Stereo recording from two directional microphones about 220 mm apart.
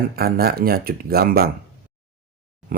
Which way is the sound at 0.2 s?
45° right (ahead or behind).